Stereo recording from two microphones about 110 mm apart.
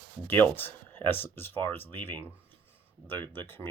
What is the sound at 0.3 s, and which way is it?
Speech, 20° left (ahead or behind).